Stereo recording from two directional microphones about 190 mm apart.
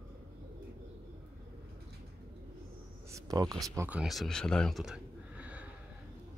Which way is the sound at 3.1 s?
15° right (ahead or behind).